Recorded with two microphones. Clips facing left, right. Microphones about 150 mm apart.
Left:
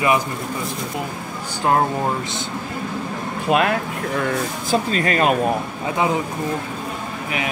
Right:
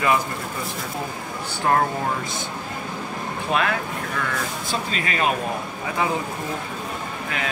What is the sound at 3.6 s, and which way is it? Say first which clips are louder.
Speech: left 4 dB; 40° left (ahead or behind).